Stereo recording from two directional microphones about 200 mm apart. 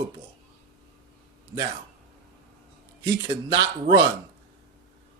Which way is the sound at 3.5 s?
25° right (ahead or behind).